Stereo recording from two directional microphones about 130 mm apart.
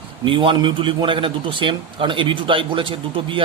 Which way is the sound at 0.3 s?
40° right (ahead or behind).